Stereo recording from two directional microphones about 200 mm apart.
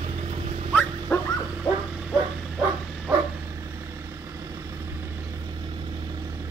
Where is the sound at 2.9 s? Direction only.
10° right (ahead or behind).